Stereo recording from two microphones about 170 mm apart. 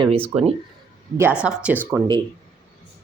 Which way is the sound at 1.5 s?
10° right (ahead or behind).